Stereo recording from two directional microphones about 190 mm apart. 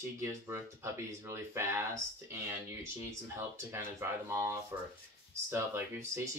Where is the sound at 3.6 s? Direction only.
15° right (ahead or behind).